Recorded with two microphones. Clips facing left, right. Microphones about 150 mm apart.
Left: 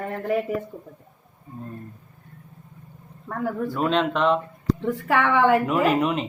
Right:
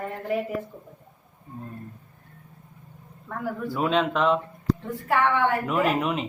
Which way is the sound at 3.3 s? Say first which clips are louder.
Left 4 dB; 45° left (ahead or behind).